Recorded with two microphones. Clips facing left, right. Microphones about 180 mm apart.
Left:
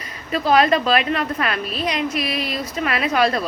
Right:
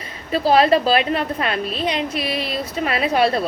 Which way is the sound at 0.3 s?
30° right (ahead or behind).